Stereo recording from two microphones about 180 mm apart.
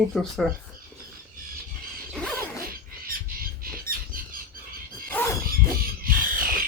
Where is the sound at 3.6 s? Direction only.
50° right (ahead or behind).